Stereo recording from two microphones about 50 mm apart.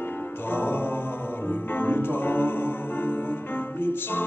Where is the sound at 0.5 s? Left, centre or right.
Left.